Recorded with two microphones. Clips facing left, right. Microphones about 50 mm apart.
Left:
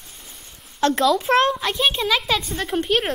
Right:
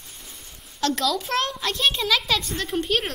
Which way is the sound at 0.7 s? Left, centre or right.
Left.